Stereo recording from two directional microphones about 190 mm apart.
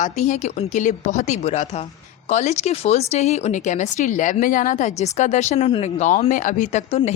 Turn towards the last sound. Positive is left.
turn(degrees=40)  # may be behind; listen again after turning